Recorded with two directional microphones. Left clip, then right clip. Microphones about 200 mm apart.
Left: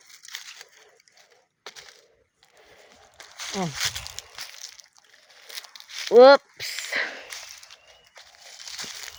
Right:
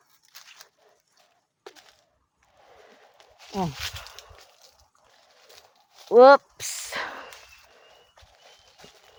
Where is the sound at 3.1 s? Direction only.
55° left (ahead or behind).